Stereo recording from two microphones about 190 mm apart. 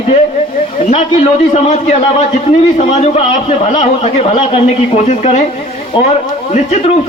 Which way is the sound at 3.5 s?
35° left (ahead or behind).